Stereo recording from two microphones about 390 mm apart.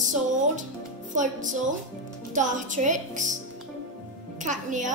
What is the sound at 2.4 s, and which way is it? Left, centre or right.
Music, centre.